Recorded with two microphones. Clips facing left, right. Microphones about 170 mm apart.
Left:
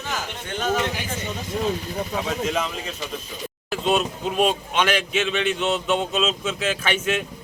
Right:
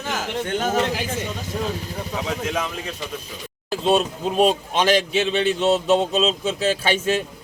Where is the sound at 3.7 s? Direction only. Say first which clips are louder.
Right 3 dB; 30° right (ahead or behind).